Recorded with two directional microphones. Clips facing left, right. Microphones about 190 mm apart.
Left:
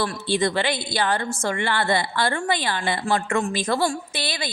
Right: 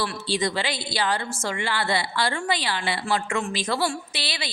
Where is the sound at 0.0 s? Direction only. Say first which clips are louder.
Left 3 dB; 55° left (ahead or behind).